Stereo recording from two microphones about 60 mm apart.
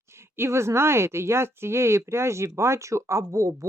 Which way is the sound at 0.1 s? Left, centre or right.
Right.